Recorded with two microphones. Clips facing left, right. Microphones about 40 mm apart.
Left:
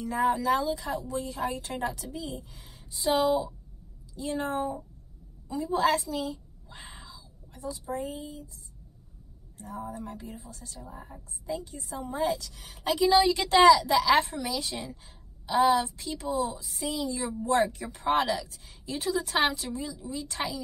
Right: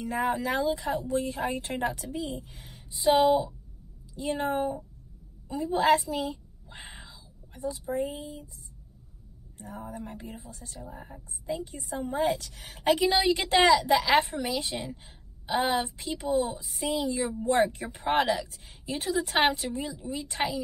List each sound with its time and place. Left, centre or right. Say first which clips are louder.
0.0 s a woman's voice: left 2 dB; right
0.5 s a woman's voice: left 1 dB; centre
0.9 s a woman's voice: right 3 dB; right
3.1 s a woman's voice: right 3 dB; centre
5.8 s a woman's voice: right 3 dB; right
6.8 s a sound: right 1 dB; right
9.6 s a woman's voice: left 2 dB; right
11.9 s a woman's voice: right 2 dB; right